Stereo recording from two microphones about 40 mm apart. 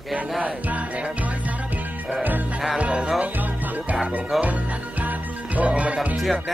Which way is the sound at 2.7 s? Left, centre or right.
Right.